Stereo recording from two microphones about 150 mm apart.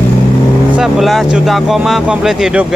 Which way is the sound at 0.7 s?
5° right (ahead or behind).